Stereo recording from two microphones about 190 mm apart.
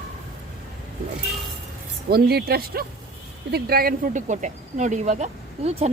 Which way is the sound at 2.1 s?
55° right (ahead or behind).